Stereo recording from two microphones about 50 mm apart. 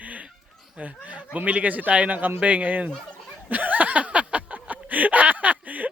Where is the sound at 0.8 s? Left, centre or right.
Right.